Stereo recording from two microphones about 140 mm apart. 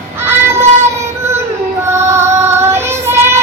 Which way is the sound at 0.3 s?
20° right (ahead or behind).